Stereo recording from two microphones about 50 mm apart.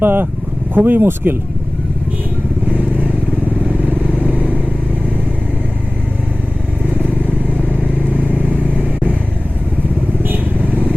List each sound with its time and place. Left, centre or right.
0.0 s speech: right
2.7 s vehicle: right
6.8 s vehicle: right
10.2 s vehicle: right